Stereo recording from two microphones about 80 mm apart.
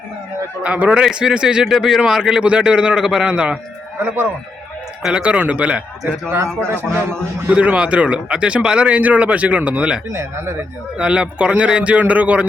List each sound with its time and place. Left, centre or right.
0.6 s a man's voice: centre
4.0 s speech: right
5.0 s a man's voice: centre
6.3 s a man's voice: right
7.5 s a man's voice: centre